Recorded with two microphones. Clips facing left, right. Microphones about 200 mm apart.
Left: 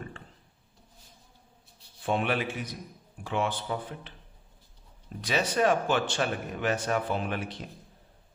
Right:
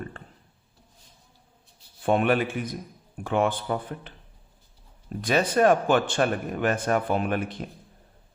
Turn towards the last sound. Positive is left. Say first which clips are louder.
# right 6 dB
turn(degrees=-50)  # may be behind; listen again after turning